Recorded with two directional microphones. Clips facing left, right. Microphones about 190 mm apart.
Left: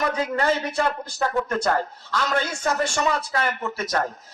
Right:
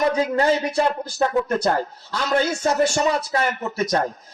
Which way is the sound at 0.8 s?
25° right (ahead or behind).